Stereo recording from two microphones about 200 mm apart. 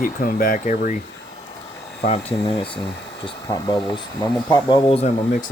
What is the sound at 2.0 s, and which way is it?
Speech, 30° left (ahead or behind).